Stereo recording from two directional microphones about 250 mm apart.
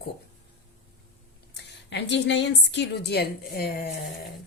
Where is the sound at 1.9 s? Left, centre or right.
Left.